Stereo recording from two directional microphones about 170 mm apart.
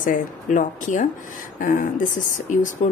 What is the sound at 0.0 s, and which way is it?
Speech, 50° left (ahead or behind).